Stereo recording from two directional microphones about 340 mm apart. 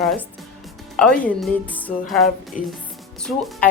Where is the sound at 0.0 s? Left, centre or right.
Centre.